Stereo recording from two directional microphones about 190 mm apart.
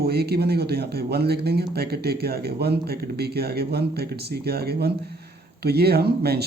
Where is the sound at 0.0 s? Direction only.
55° right (ahead or behind).